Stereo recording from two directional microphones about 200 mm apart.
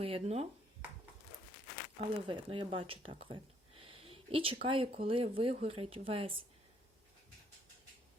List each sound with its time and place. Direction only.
0.0 s speech: 30° right (ahead or behind)
2.0 s speech: 25° right (ahead or behind)